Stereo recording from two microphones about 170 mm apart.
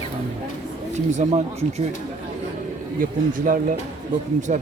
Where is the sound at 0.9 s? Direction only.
40° right (ahead or behind).